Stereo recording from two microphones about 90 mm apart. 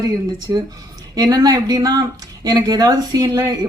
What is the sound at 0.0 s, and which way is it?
Speech, 45° right (ahead or behind).